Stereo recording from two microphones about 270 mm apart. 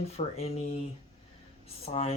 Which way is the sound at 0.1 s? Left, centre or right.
Left.